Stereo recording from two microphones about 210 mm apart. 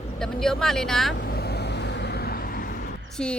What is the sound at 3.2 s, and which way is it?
Speech, 5° left (ahead or behind).